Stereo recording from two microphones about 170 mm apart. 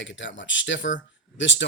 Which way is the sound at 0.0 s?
90° left.